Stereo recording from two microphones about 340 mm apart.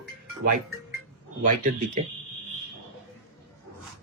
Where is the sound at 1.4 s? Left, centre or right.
Right.